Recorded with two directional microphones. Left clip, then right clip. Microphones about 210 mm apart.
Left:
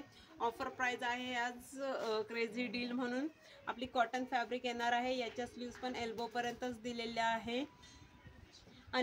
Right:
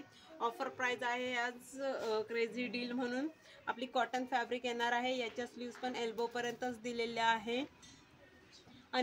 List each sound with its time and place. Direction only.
0.4 s a woman's voice: centre (ahead or behind)